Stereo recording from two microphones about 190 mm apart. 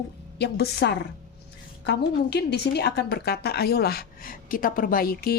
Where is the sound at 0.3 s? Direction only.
60° left (ahead or behind).